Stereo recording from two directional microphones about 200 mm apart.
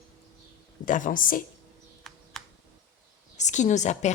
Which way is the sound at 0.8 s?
40° left (ahead or behind).